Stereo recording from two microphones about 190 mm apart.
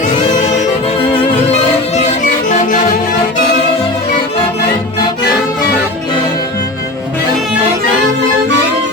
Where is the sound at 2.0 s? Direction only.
40° left (ahead or behind).